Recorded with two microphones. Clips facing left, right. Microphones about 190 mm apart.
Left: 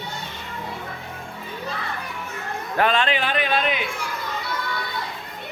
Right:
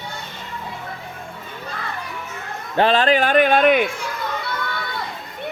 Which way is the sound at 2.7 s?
30° right (ahead or behind).